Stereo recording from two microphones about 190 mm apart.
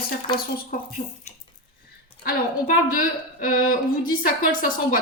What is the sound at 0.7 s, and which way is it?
Speech, 45° left (ahead or behind).